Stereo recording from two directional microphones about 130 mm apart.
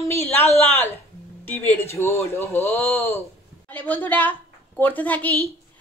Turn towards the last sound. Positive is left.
turn(degrees=10)  # may be behind; listen again after turning